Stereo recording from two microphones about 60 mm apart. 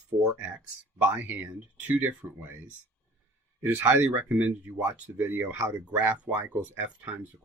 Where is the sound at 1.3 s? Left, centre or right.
Right.